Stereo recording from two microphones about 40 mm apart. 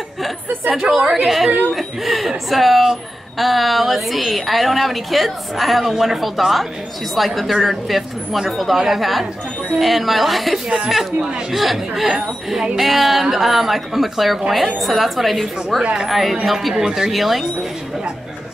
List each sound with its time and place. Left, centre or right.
0.7 s a woman's voice: centre
11.1 s speech: right
11.5 s speech: centre
16.7 s a woman's voice: centre